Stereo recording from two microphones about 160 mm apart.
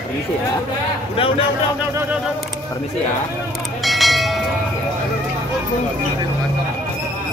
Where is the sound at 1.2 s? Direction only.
35° left (ahead or behind).